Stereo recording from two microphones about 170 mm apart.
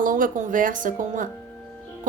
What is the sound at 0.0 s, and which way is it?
Speech, 50° right (ahead or behind).